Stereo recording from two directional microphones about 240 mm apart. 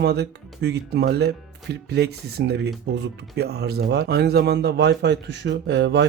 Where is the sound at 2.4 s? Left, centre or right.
Right.